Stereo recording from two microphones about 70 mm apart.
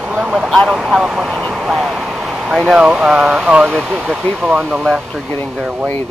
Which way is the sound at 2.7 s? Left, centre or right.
Centre.